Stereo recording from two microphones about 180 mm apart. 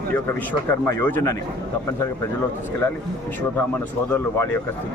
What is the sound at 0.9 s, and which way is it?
Speech, 15° left (ahead or behind).